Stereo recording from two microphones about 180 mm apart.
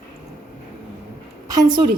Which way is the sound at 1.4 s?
25° right (ahead or behind).